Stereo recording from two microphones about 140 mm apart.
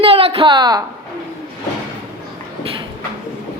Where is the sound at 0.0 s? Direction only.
45° right (ahead or behind).